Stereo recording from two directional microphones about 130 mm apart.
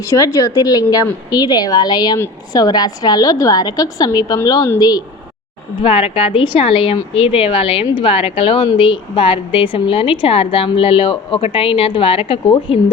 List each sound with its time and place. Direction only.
0.1 s a woman's voice: 25° left (ahead or behind)
2.1 s speech: 20° left (ahead or behind)
2.6 s a woman's voice: 30° left (ahead or behind)
5.8 s speech: 45° left (ahead or behind)